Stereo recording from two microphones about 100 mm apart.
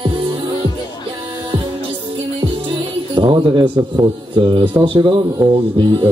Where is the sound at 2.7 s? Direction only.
55° right (ahead or behind).